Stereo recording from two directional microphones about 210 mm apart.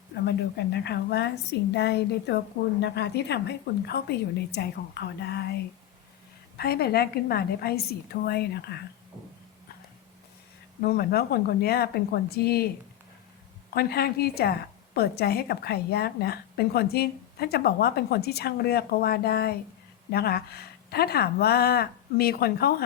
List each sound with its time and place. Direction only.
0.3 s a woman's voice: 50° left (ahead or behind)
6.6 s a woman's voice: 45° left (ahead or behind)
10.8 s a woman's voice: 50° left (ahead or behind)
13.7 s a woman's voice: 50° left (ahead or behind)